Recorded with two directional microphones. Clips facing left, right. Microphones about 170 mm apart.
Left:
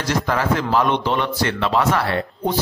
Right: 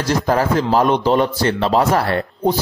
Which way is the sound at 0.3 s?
35° right (ahead or behind).